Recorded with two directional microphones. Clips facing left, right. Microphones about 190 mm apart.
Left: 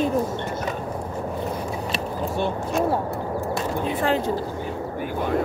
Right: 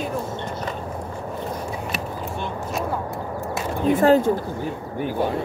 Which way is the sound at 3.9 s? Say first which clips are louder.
Right 9 dB; 45° right (ahead or behind).